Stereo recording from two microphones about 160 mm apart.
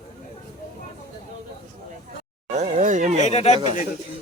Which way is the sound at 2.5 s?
45° right (ahead or behind).